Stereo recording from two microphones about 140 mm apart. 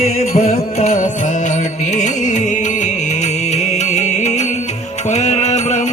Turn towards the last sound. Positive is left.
turn(degrees=55)  # may be behind; listen again after turning